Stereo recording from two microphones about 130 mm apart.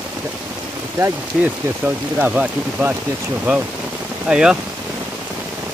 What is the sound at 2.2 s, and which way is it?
Speech, 10° right (ahead or behind).